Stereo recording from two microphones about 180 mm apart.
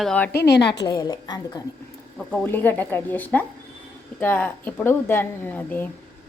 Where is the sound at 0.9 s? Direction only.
20° left (ahead or behind).